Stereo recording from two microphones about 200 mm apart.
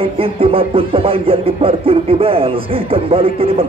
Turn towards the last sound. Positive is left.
turn(degrees=-30)  # may be behind; listen again after turning